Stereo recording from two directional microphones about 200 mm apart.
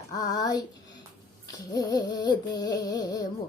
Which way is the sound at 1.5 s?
20° left (ahead or behind).